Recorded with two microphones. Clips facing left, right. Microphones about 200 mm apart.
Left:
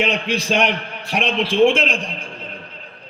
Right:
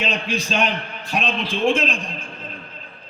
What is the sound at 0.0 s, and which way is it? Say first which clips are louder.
A man's voice: left 4 dB; 75° left (ahead or behind).